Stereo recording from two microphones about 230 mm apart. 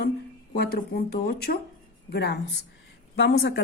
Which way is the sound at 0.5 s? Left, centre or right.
Left.